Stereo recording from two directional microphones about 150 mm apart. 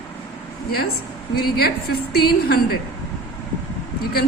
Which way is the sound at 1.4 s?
90° left.